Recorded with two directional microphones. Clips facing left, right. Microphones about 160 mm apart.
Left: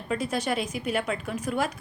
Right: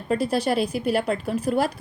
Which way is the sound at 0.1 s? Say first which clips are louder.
Right 5 dB; 35° right (ahead or behind).